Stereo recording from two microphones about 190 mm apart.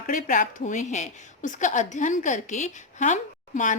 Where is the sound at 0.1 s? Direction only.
45° left (ahead or behind).